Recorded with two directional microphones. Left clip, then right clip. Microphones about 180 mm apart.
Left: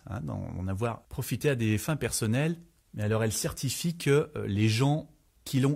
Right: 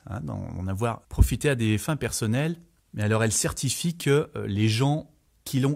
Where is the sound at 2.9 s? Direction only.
35° right (ahead or behind).